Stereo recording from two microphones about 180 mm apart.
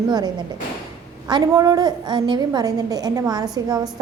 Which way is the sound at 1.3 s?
20° right (ahead or behind).